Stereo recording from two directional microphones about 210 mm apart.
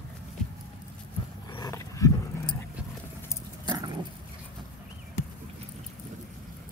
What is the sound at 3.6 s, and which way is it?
Dog, 20° right (ahead or behind).